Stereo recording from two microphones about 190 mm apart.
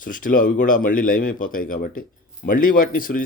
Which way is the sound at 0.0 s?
45° left (ahead or behind).